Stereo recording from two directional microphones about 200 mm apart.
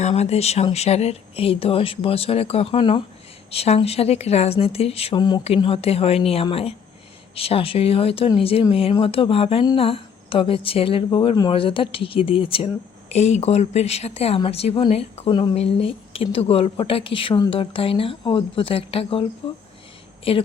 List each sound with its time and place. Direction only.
0.0 s speech: 30° left (ahead or behind)
20.3 s speech: 25° left (ahead or behind)